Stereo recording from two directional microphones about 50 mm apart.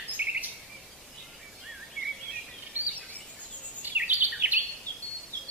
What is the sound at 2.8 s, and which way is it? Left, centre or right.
Bird vocalization, right.